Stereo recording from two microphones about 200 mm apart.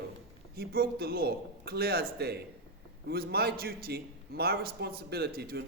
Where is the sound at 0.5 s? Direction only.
50° right (ahead or behind).